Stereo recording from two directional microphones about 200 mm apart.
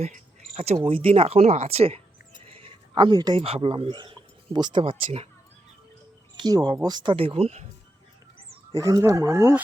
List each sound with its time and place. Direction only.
0.0 s speech: 35° right (ahead or behind)
6.3 s speech: 20° right (ahead or behind)
8.7 s speech: 15° right (ahead or behind)